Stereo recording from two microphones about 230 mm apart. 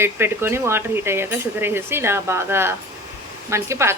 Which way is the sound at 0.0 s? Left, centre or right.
Centre.